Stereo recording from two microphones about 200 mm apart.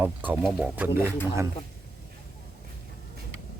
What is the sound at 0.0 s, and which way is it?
Speech, 10° right (ahead or behind).